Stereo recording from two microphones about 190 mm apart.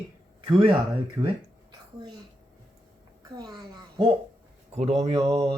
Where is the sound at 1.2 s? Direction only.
15° right (ahead or behind).